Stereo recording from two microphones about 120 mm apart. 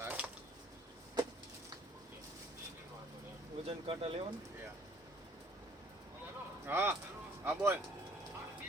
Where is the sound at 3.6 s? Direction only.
50° right (ahead or behind).